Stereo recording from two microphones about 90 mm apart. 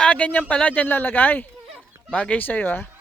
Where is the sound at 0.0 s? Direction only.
15° left (ahead or behind).